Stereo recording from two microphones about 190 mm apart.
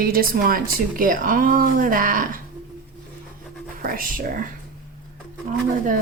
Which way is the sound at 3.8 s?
50° right (ahead or behind).